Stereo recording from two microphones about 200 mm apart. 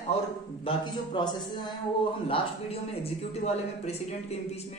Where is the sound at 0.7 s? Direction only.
20° left (ahead or behind).